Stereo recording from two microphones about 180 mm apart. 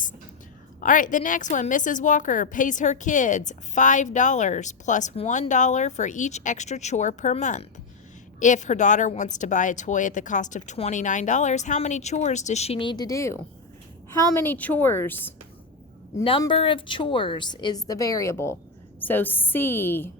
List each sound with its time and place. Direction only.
0.8 s a woman's voice: 45° left (ahead or behind); by 15.3 s 10° left (ahead or behind)
16.4 s a woman's voice: 30° left (ahead or behind); by 20.1 s 10° left (ahead or behind)